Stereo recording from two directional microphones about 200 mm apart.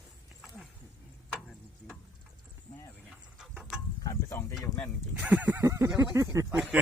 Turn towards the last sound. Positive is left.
turn(degrees=-5)  # may be behind; listen again after turning